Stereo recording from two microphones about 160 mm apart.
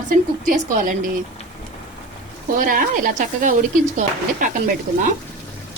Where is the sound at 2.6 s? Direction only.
55° right (ahead or behind).